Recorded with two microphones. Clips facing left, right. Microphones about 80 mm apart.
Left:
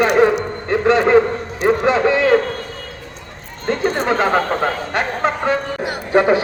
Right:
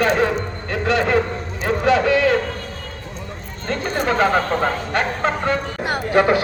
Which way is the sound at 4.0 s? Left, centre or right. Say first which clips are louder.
Right 2 dB; left.